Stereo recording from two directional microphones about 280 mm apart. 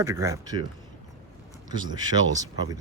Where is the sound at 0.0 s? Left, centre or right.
Centre.